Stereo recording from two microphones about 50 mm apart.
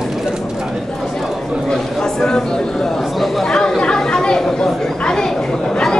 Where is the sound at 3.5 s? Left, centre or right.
Centre.